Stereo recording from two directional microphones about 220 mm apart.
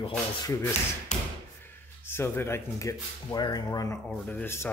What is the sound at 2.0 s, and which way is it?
Speech, 10° left (ahead or behind).